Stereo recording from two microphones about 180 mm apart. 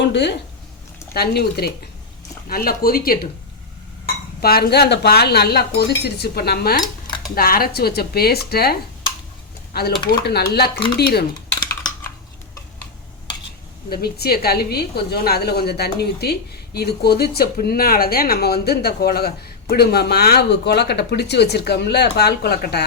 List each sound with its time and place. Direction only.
0.0 s speech: 75° left (ahead or behind)
1.1 s a woman's voice: 60° left (ahead or behind)
10.1 s a woman's voice: 60° left (ahead or behind)
13.9 s a woman's voice: 60° left (ahead or behind)